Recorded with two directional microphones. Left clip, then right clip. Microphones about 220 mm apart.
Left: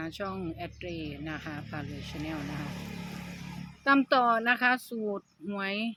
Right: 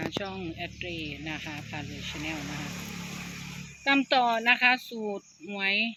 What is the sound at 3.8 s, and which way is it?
Speech, 15° left (ahead or behind).